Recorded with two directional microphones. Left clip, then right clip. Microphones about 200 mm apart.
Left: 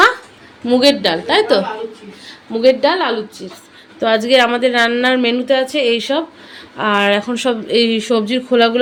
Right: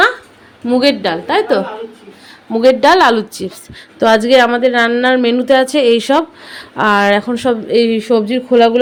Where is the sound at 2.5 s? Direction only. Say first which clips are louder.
Right 4 dB; 20° right (ahead or behind); by 3.5 s 35° right (ahead or behind).